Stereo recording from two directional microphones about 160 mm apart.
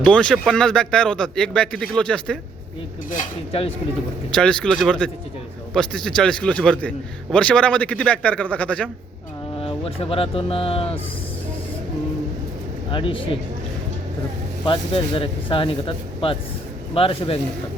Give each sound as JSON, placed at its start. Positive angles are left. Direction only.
{"t": 0.0, "sound": "speech", "side_deg": 5}
{"t": 4.4, "sound": "a man's voice", "side_deg": 5}
{"t": 9.6, "sound": "speech", "side_deg": 35}
{"t": 12.9, "sound": "speech", "side_deg": 35}
{"t": 14.6, "sound": "speech", "side_deg": 35}